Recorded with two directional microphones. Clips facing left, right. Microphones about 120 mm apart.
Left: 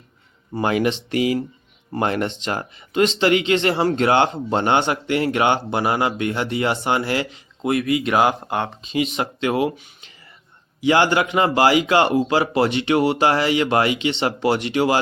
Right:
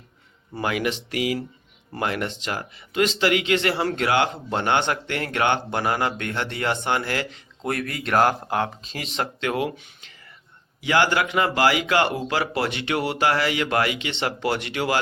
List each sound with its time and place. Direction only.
0.5 s a man's voice: 30° left (ahead or behind); by 9.0 s centre (ahead or behind)
9.1 s a man's voice: 15° left (ahead or behind)